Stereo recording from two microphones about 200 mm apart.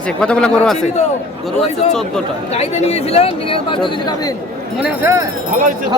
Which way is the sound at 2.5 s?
30° left (ahead or behind).